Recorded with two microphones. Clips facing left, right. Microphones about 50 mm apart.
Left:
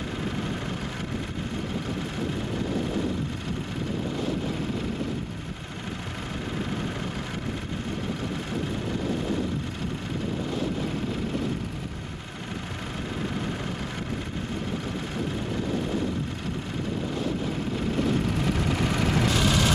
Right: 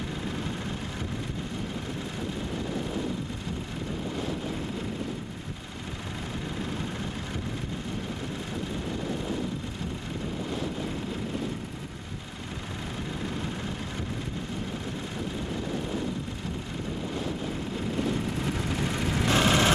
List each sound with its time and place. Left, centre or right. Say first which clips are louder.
17.9 s vehicle: left 3 dB; left
19.2 s vehicle: right 5 dB; right